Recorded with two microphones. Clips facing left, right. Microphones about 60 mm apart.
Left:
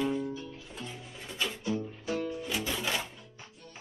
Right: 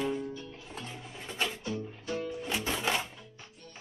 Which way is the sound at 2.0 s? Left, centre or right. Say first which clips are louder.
Left 1 dB; centre.